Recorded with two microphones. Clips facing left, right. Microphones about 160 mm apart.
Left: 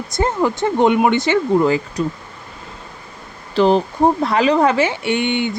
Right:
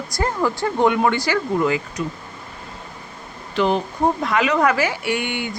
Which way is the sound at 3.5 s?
35° left (ahead or behind).